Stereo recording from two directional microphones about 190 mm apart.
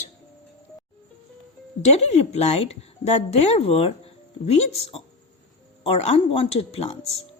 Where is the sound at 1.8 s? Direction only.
35° left (ahead or behind).